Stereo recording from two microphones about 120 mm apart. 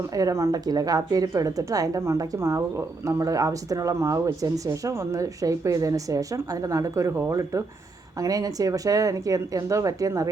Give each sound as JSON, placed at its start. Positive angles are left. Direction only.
{"t": 0.1, "sound": "a woman's voice", "side_deg": -30}